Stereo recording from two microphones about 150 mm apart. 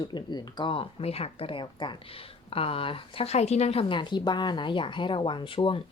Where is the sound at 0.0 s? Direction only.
30° left (ahead or behind).